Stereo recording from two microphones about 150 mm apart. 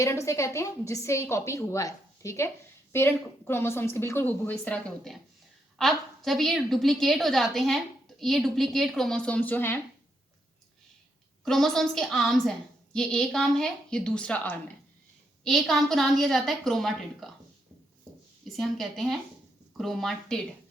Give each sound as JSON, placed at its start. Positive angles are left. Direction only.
{"t": 0.0, "sound": "a woman's voice", "side_deg": 20}
{"t": 11.4, "sound": "a woman's voice", "side_deg": 0}
{"t": 18.4, "sound": "a woman's voice", "side_deg": 0}